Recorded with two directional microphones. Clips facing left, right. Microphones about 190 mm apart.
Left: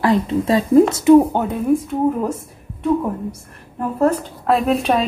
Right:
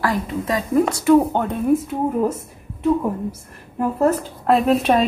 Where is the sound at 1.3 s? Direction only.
10° left (ahead or behind).